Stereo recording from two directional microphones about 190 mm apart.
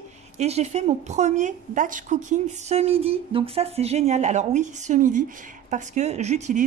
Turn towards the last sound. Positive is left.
turn(degrees=-40)  # may be behind; listen again after turning